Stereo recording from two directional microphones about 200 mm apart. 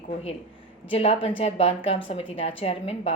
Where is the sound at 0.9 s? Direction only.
30° left (ahead or behind).